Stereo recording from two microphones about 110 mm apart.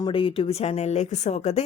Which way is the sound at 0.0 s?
55° left (ahead or behind).